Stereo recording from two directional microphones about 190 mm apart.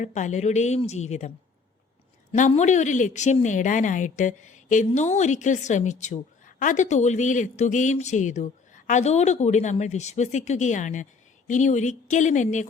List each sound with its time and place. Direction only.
0.0 s a woman's voice: 40° left (ahead or behind)
2.5 s a woman's voice: 40° left (ahead or behind)